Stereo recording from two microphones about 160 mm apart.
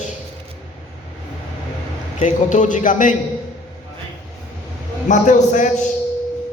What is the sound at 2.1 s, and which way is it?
A man's voice, 50° left (ahead or behind).